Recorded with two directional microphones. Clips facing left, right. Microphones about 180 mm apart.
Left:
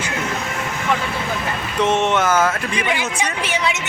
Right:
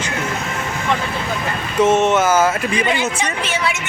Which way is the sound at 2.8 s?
10° left (ahead or behind).